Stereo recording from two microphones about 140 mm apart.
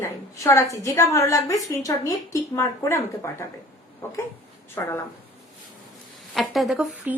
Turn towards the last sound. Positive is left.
turn(degrees=-5)  # may be behind; listen again after turning